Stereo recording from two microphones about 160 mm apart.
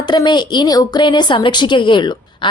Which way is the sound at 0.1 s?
30° left (ahead or behind).